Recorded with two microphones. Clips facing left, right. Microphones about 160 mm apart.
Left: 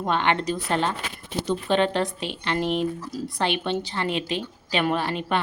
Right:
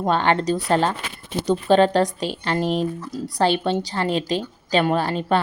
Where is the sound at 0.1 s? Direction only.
40° right (ahead or behind).